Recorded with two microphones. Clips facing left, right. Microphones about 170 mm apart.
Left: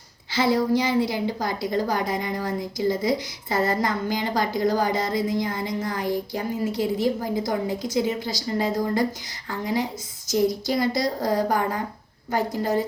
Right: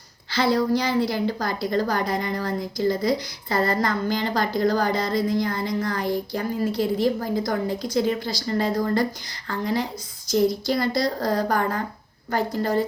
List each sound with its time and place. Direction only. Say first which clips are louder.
0.3 s a woman's voice: even; 20° left (ahead or behind)